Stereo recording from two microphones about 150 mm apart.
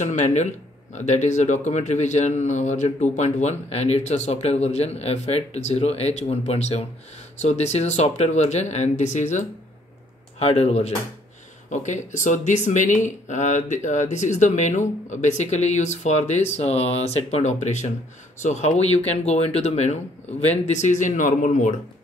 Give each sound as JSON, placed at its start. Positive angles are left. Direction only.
{"t": 0.0, "sound": "speech", "side_deg": 50}